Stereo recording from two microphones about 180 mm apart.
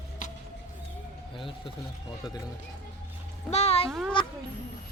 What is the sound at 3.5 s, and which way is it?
Speech, 35° left (ahead or behind).